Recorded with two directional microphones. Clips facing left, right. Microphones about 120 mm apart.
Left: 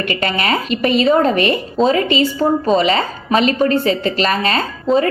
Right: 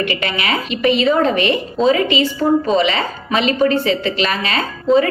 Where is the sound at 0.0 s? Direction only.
40° left (ahead or behind).